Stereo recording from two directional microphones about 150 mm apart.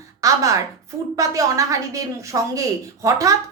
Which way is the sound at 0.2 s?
20° right (ahead or behind).